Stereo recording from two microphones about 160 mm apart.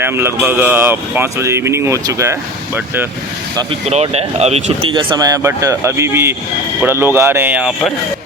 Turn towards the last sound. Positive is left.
turn(degrees=-5)  # may be behind; listen again after turning